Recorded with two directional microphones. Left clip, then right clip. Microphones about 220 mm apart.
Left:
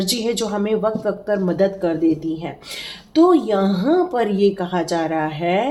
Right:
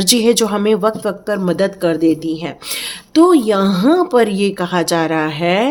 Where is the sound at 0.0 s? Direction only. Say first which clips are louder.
Right 8 dB; 50° right (ahead or behind).